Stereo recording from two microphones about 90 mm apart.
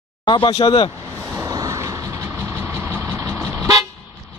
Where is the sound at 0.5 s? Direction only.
45° left (ahead or behind).